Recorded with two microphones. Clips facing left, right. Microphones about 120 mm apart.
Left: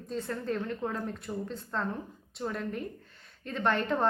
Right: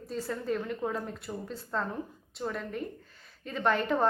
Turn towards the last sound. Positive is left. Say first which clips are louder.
# right 1 dB
turn(degrees=-5)  # may be behind; listen again after turning